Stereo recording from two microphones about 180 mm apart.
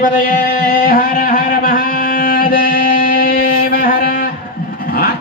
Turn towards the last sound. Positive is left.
turn(degrees=55)  # may be behind; listen again after turning